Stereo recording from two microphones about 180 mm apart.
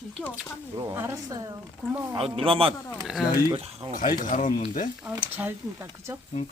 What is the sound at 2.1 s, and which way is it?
Speech, 30° right (ahead or behind).